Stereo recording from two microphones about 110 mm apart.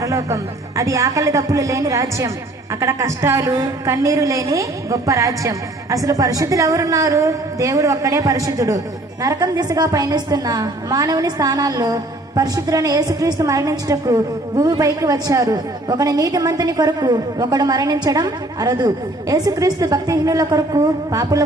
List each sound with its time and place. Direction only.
0.0 s music: 30° right (ahead or behind)
0.8 s a woman's voice: 30° right (ahead or behind)